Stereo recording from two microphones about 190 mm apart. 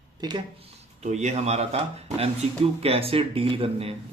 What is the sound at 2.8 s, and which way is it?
Speech, 30° right (ahead or behind).